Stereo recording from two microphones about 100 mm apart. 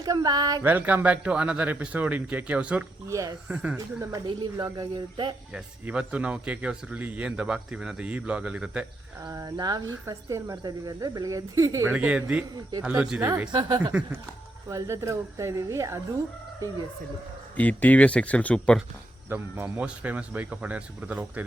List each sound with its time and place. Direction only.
0.0 s speech: 40° right (ahead or behind)
0.6 s speech: 15° right (ahead or behind)
3.1 s speech: 35° right (ahead or behind)
3.5 s speech: 15° right (ahead or behind)
4.5 s speech: 45° right (ahead or behind)
5.5 s speech: 10° right (ahead or behind)
9.2 s speech: 40° right (ahead or behind)
11.9 s speech: 10° right (ahead or behind)
13.5 s speech: 50° right (ahead or behind)
14.7 s speech: 30° right (ahead or behind)
17.6 s speech: 15° left (ahead or behind)
19.3 s speech: 20° right (ahead or behind)